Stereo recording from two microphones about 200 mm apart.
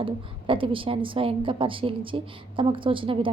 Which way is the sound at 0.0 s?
25° right (ahead or behind).